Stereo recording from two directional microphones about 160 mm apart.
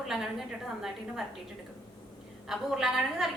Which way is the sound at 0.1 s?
Centre (ahead or behind).